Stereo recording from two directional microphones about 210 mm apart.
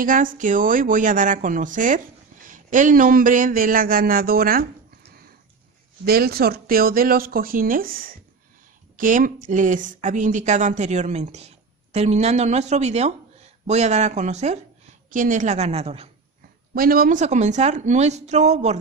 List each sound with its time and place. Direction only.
0.0 s speech: 40° right (ahead or behind)
6.0 s speech: 50° right (ahead or behind); by 16.1 s 30° right (ahead or behind)
16.7 s speech: 45° right (ahead or behind)